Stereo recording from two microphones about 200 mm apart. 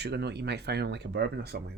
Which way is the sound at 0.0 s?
55° right (ahead or behind).